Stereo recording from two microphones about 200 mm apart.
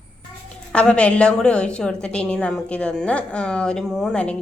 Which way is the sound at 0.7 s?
5° left (ahead or behind).